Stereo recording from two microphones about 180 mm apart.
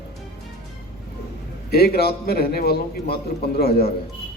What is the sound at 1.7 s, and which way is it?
A man's voice, 60° left (ahead or behind).